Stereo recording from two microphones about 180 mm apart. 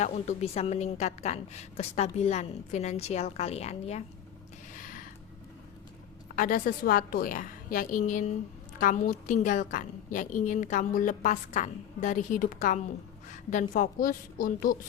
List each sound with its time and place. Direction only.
0.0 s a woman's voice: 40° left (ahead or behind)
4.8 s a sound: 50° left (ahead or behind)
6.3 s a woman's voice: 50° left (ahead or behind)